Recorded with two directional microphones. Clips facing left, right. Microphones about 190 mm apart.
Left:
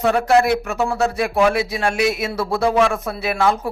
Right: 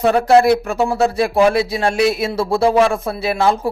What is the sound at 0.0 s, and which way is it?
Speech, 35° right (ahead or behind).